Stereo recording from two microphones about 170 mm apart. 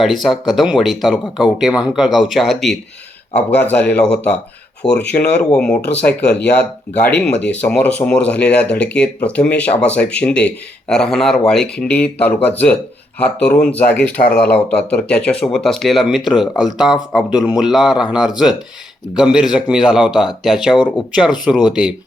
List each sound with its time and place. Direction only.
0.0 s speech: centre (ahead or behind)
5.8 s speech: 75° left (ahead or behind)
6.1 s speech: 5° left (ahead or behind)